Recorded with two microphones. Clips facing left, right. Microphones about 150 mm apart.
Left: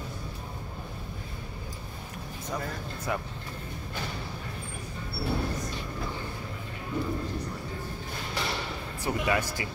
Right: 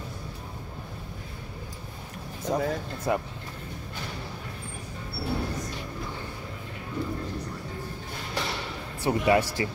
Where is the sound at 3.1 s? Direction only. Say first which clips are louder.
Right 5 dB; 30° right (ahead or behind).